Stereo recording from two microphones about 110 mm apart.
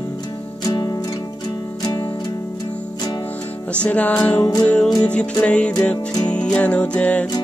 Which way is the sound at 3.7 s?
10° left (ahead or behind).